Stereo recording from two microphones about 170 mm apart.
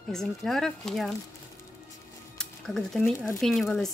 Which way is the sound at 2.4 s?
5° left (ahead or behind).